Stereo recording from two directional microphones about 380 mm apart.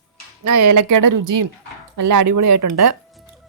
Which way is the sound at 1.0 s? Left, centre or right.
Right.